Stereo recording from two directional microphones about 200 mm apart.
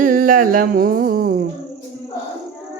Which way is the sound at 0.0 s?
45° right (ahead or behind).